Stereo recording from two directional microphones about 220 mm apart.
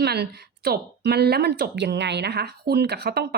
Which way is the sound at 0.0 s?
45° right (ahead or behind).